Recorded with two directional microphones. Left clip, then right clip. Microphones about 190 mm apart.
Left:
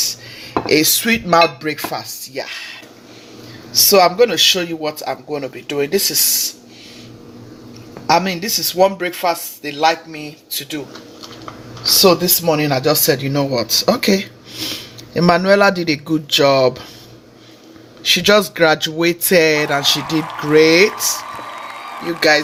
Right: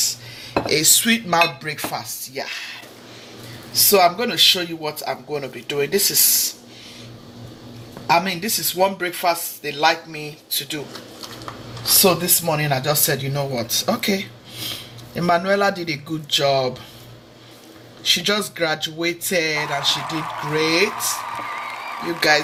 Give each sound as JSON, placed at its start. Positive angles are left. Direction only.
{"t": 0.7, "sound": "speech", "side_deg": 60}
{"t": 3.8, "sound": "speech", "side_deg": 60}
{"t": 8.0, "sound": "speech", "side_deg": 60}
{"t": 12.0, "sound": "speech", "side_deg": 55}
{"t": 18.0, "sound": "speech", "side_deg": 65}
{"t": 22.0, "sound": "a man's voice", "side_deg": 65}